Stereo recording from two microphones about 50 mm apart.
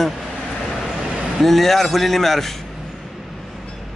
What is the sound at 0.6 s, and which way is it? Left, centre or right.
Vehicle, centre.